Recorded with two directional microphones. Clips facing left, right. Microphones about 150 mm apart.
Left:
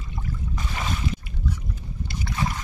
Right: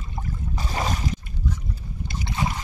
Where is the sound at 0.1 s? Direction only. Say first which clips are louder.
Right 1 dB; 35° right (ahead or behind).